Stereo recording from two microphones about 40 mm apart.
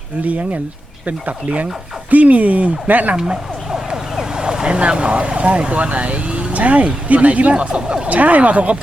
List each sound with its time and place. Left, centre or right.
0.3 s speech: right
3.2 s speech: centre; by 7.7 s right
7.7 s speech: centre
8.0 s speech: right